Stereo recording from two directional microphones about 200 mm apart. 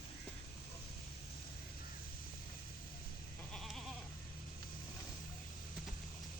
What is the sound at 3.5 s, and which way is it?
Goat, centre (ahead or behind).